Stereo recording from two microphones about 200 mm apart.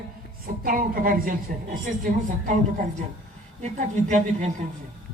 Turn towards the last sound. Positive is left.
turn(degrees=-35)  # may be behind; listen again after turning